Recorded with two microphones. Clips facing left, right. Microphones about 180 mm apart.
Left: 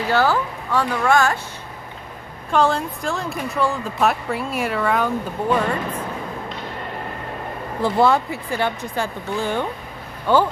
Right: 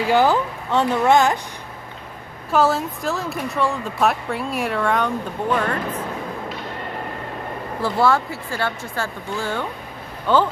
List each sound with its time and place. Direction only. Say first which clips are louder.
0.1 s speech: right 2 dB; 15° right (ahead or behind)
2.5 s speech: even; 5° right (ahead or behind)
7.8 s speech: left 2 dB; 20° left (ahead or behind)